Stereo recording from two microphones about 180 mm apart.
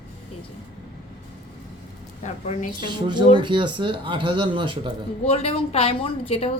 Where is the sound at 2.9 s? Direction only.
25° right (ahead or behind).